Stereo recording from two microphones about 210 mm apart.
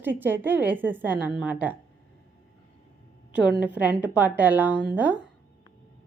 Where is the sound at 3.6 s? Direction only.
5° right (ahead or behind).